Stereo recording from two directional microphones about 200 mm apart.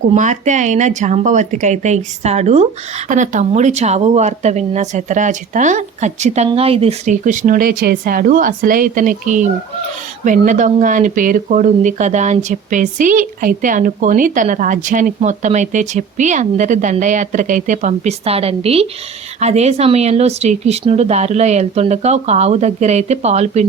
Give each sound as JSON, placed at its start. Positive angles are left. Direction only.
{"t": 0.1, "sound": "speech", "side_deg": -35}